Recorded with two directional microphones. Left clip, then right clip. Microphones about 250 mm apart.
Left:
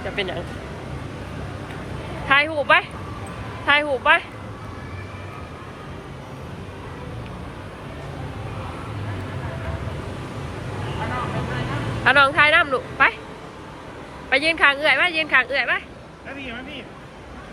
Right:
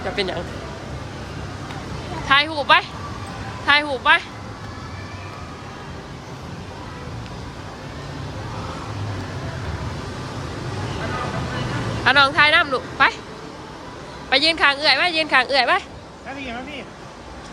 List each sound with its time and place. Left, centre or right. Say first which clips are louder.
0.2 s a woman's voice: right 1 dB; centre
2.2 s a woman's voice: right 1 dB; centre
12.0 s a woman's voice: even; centre
14.3 s a woman's voice: right 1 dB; centre